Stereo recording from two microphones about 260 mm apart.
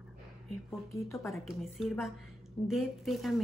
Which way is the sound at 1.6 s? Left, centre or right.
Centre.